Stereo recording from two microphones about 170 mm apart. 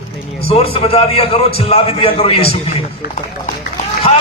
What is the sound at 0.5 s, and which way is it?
A man's voice, 35° left (ahead or behind).